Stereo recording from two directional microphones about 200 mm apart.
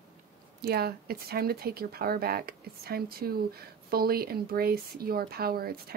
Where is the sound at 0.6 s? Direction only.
50° right (ahead or behind).